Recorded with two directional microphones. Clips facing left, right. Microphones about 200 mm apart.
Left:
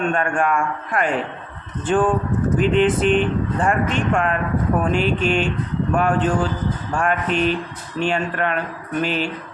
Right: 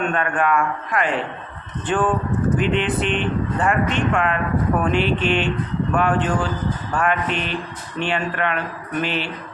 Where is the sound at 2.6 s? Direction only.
40° left (ahead or behind).